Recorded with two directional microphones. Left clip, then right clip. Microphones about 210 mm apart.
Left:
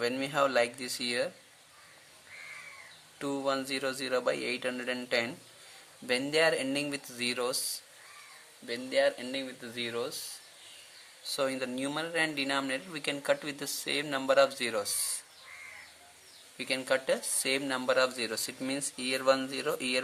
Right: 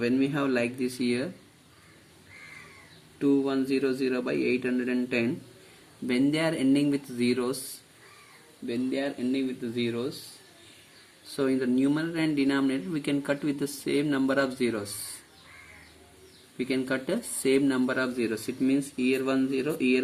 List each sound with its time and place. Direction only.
0.0 s speech: 30° left (ahead or behind)
3.2 s speech: 30° left (ahead or behind)
8.6 s speech: 30° left (ahead or behind)
11.3 s speech: 20° left (ahead or behind)
16.6 s speech: 20° left (ahead or behind)